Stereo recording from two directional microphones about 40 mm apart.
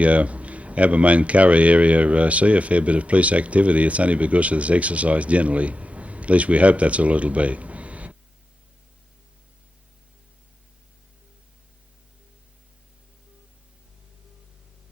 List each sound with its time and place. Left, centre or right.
0.0 s speech: right